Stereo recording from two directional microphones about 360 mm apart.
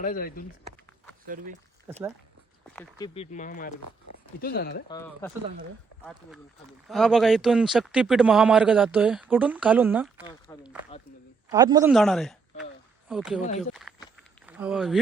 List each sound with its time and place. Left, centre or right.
0.0 s speech: left
1.3 s speech: centre
2.7 s speech: centre
4.9 s speech: centre
10.2 s speech: centre
11.5 s speech: centre
13.6 s walk: centre
14.4 s speech: centre